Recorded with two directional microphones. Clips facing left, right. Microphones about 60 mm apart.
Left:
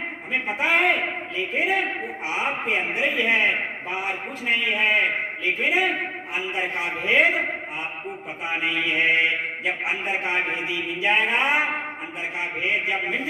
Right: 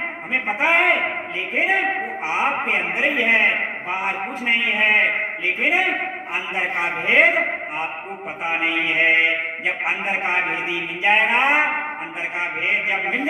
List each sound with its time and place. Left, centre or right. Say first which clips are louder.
0.3 s a man's voice: right 3 dB; right